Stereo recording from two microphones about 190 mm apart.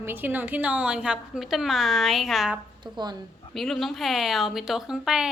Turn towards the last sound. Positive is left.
turn(degrees=-5)  # may be behind; listen again after turning